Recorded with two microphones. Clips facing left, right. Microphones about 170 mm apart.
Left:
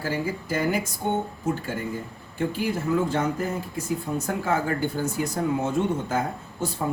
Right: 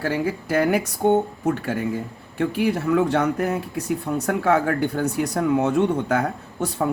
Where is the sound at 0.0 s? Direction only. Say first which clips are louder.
Right 4 dB; 65° right (ahead or behind).